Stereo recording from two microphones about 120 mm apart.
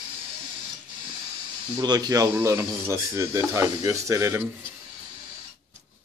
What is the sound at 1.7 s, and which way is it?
Speech, 35° right (ahead or behind).